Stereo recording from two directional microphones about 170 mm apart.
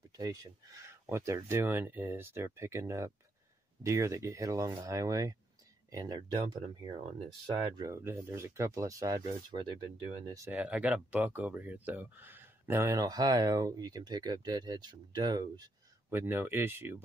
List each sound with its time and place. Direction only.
0.2 s speech: 20° right (ahead or behind)